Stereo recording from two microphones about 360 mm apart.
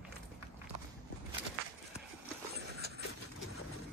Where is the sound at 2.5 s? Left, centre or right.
Right.